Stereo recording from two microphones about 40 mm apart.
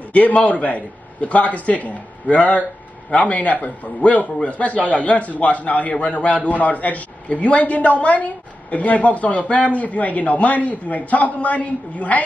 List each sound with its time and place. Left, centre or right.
0.1 s a man's voice: left